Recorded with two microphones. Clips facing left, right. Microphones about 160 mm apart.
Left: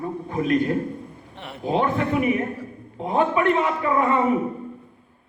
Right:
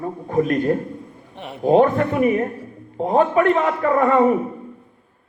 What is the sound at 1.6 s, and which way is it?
A man's voice, 45° right (ahead or behind).